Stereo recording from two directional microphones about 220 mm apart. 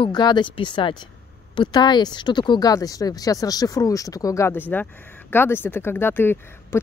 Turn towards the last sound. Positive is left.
turn(degrees=10)  # may be behind; listen again after turning